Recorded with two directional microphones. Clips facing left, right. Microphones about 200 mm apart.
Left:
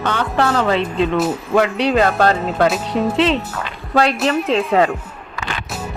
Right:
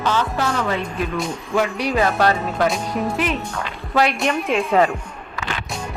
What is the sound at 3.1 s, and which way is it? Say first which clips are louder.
Speech: left 6 dB; 90° left.